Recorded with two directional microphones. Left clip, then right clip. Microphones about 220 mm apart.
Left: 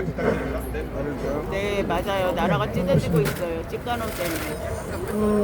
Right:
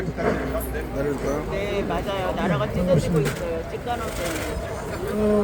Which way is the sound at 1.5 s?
50° left (ahead or behind).